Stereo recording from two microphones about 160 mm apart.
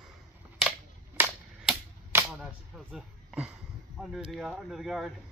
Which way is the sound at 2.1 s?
10° right (ahead or behind).